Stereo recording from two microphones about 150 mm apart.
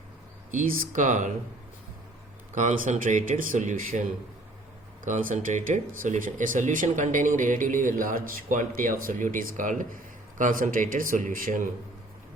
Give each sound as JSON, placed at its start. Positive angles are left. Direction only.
{"t": 0.5, "sound": "speech", "side_deg": -70}
{"t": 2.6, "sound": "speech", "side_deg": -60}
{"t": 5.0, "sound": "speech", "side_deg": -55}